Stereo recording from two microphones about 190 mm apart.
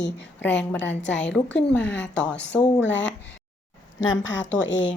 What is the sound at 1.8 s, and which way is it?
Speech, 70° left (ahead or behind).